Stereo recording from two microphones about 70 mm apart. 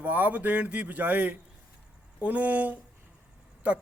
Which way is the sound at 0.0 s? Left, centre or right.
Right.